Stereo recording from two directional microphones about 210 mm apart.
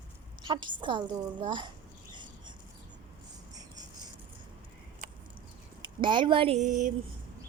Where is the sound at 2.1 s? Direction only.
20° right (ahead or behind).